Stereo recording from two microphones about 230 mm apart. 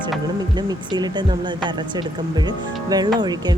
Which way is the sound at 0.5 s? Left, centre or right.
Centre.